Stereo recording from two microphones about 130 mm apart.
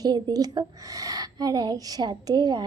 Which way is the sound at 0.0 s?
30° right (ahead or behind).